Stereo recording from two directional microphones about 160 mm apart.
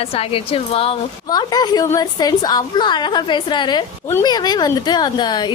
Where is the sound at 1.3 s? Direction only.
25° left (ahead or behind).